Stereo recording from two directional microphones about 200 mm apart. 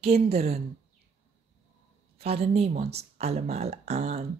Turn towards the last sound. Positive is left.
turn(degrees=-35)  # may be behind; listen again after turning